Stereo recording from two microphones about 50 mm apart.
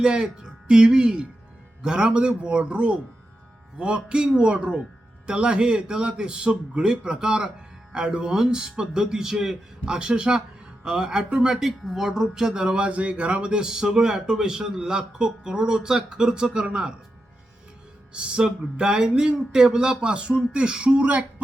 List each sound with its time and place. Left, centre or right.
0.0 s speech: centre
18.1 s speech: centre